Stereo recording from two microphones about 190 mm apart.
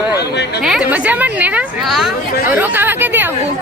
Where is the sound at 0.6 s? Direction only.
5° right (ahead or behind).